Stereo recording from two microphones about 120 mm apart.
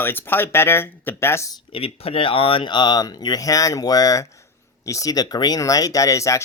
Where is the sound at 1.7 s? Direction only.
55° left (ahead or behind).